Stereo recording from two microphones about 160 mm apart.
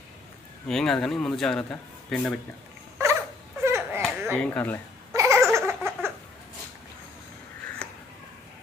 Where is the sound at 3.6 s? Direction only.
15° right (ahead or behind).